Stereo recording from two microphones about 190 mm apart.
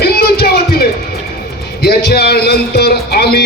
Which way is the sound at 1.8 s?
55° left (ahead or behind).